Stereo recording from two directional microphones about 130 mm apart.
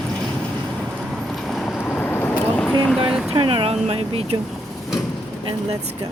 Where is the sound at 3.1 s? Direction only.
5° right (ahead or behind).